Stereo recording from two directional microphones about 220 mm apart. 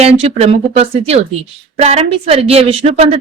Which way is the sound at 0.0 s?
30° right (ahead or behind).